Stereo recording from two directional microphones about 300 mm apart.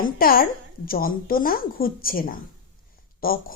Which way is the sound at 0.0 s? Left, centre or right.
Left.